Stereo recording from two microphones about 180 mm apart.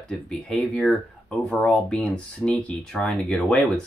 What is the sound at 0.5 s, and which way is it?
Speech, centre (ahead or behind).